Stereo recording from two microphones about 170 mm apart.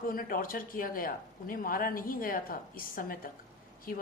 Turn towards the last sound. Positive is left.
turn(degrees=55)  # may be behind; listen again after turning